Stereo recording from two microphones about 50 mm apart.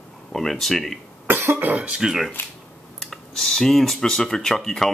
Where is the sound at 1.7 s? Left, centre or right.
Right.